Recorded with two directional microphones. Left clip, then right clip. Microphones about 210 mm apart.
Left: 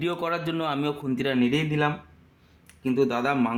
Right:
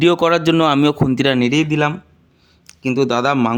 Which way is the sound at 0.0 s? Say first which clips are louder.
Right 14 dB; 45° right (ahead or behind).